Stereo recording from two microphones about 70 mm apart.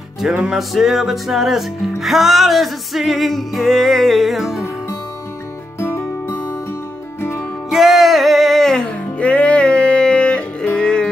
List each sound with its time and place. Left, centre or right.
0.4 s music: centre
5.8 s music: left
7.7 s music: centre
9.2 s music: centre